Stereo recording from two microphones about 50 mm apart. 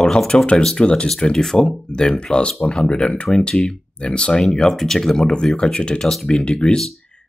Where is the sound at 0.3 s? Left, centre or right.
Left.